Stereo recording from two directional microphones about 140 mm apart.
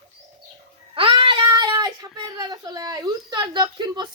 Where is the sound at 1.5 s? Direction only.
30° right (ahead or behind).